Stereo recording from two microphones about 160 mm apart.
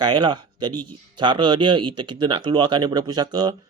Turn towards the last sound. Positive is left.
turn(degrees=-25)  # may be behind; listen again after turning